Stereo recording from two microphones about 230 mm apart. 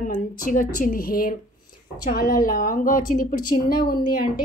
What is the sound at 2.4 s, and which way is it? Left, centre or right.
Speech, left.